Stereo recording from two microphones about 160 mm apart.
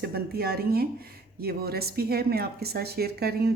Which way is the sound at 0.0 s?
75° right (ahead or behind).